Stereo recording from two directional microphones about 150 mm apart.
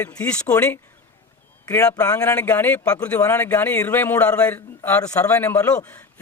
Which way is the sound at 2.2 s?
10° left (ahead or behind).